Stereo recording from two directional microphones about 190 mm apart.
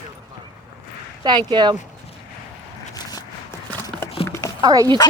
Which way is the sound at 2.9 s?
20° left (ahead or behind).